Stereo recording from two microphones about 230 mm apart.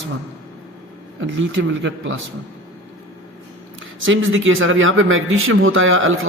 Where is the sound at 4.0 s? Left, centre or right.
Right.